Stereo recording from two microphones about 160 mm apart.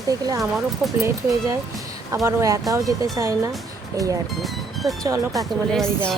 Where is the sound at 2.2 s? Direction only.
20° right (ahead or behind).